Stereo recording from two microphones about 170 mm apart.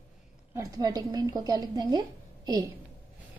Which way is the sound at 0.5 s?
20° right (ahead or behind).